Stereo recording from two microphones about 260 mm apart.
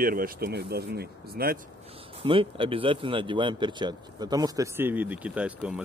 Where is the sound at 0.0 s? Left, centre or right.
Right.